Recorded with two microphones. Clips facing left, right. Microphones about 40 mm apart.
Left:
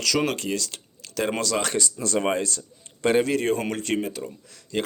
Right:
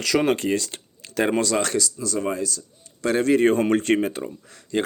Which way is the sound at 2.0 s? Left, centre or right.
Left.